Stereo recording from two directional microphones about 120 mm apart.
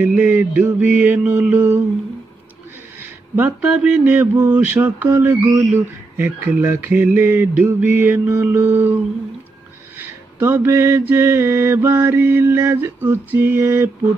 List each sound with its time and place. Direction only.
0.0 s mantra: 15° right (ahead or behind)
3.0 s mantra: 15° right (ahead or behind)
9.9 s mantra: 20° right (ahead or behind)